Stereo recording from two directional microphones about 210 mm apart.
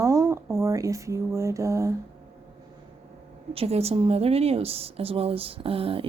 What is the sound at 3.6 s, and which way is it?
Speech, 30° right (ahead or behind).